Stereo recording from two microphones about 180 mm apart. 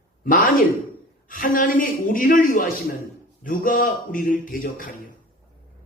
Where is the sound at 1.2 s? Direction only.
50° left (ahead or behind).